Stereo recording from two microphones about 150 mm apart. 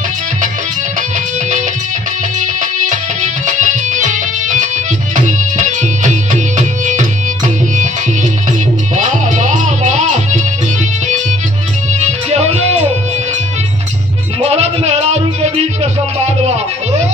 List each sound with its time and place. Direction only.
2.4 s music: 55° right (ahead or behind)
11.9 s music: 50° right (ahead or behind)
14.4 s music: 45° right (ahead or behind)